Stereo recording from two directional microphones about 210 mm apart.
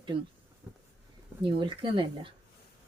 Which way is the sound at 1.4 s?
25° right (ahead or behind).